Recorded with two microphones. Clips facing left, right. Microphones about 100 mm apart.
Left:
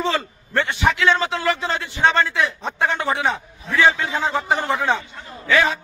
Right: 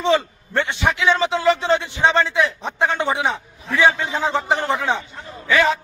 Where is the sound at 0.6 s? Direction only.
20° right (ahead or behind).